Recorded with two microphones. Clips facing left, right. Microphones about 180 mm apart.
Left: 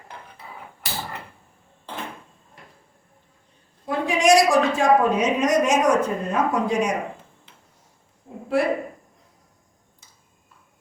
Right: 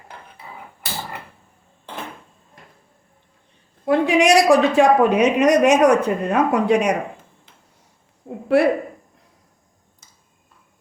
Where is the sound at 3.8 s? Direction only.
65° right (ahead or behind).